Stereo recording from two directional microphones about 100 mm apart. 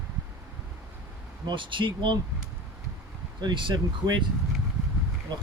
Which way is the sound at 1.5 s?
55° right (ahead or behind).